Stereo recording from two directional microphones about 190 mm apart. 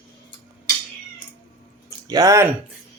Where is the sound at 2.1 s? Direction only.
20° right (ahead or behind).